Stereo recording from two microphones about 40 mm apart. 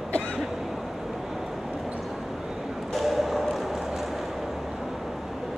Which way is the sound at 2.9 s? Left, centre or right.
Centre.